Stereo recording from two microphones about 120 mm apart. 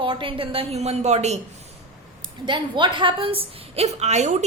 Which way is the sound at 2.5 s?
40° right (ahead or behind).